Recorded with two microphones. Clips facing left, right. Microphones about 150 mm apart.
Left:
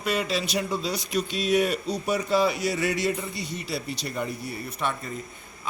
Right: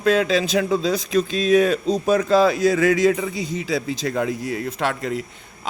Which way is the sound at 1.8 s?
90° right.